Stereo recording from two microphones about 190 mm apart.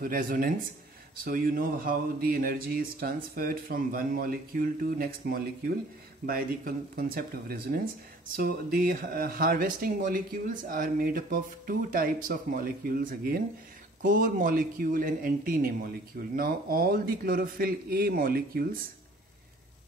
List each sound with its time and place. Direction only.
0.0 s speech: 50° right (ahead or behind)